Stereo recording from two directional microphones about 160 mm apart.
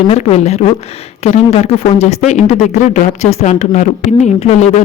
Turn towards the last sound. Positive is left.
turn(degrees=45)  # may be behind; listen again after turning